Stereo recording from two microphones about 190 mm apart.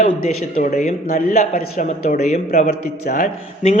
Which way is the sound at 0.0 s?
45° left (ahead or behind).